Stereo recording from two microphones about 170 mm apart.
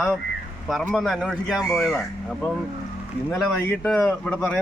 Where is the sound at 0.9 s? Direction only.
Centre (ahead or behind).